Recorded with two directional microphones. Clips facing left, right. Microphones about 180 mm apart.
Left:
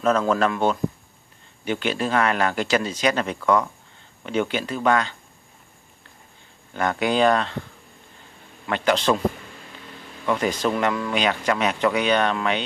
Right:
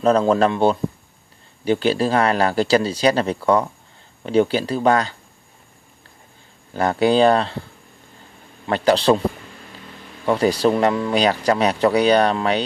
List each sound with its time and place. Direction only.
0.0 s speech: 30° right (ahead or behind)
6.7 s speech: 35° right (ahead or behind)
8.6 s speech: 35° right (ahead or behind)
10.2 s speech: 35° right (ahead or behind)